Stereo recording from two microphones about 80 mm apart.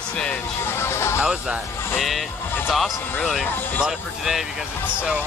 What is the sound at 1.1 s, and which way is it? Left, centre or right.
Speech, centre.